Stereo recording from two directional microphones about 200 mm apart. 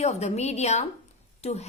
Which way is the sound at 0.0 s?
35° left (ahead or behind).